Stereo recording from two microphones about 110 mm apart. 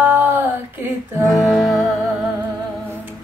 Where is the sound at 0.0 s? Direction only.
15° right (ahead or behind).